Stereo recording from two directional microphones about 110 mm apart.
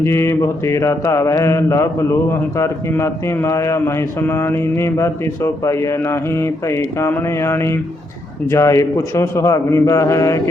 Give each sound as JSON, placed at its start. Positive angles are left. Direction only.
{"t": 0.0, "sound": "mantra", "side_deg": 25}